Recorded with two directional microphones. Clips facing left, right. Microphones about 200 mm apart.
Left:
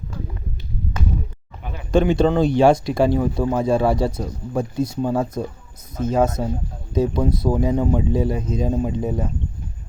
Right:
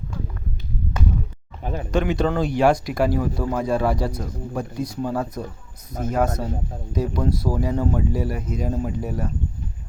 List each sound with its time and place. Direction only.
1.6 s speech: 40° right (ahead or behind)
1.9 s speech: 30° left (ahead or behind)